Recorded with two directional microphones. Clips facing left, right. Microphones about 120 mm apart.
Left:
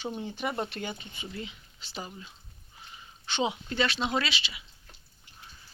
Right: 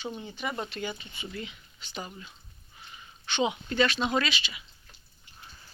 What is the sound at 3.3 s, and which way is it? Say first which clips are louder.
Speech: right 3 dB; 30° left (ahead or behind).